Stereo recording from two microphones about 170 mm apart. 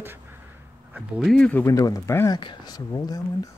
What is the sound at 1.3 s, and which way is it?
Speech, 10° left (ahead or behind).